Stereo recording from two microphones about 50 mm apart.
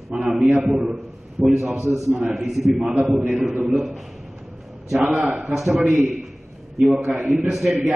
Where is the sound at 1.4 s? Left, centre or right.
Centre.